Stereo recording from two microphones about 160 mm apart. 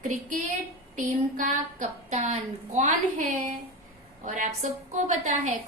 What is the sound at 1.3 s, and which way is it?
A woman's voice, 55° right (ahead or behind).